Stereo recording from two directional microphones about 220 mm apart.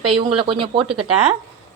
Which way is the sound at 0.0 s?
25° right (ahead or behind).